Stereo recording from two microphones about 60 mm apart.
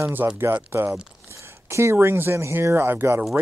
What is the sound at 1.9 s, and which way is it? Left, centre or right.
Speech, right.